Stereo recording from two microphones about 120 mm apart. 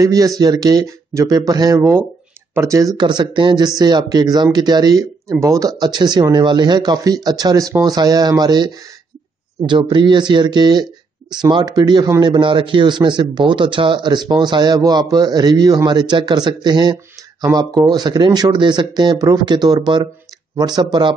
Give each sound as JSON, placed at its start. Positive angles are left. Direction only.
{"t": 0.0, "sound": "a man's voice", "side_deg": -30}
{"t": 3.0, "sound": "a man's voice", "side_deg": -40}
{"t": 9.7, "sound": "a man's voice", "side_deg": -40}